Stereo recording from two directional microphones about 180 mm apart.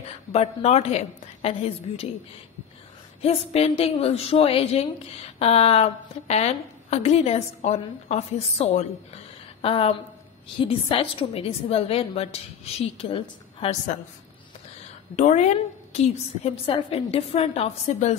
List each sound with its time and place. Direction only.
0.3 s a woman's voice: 35° left (ahead or behind)
3.2 s a woman's voice: 35° left (ahead or behind)
15.1 s a woman's voice: 40° left (ahead or behind)